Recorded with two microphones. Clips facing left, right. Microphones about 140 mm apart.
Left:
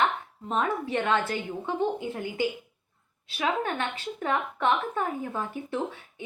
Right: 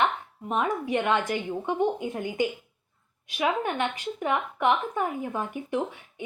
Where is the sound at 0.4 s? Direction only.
15° right (ahead or behind).